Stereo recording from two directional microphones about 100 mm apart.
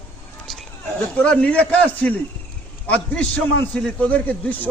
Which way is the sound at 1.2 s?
15° left (ahead or behind).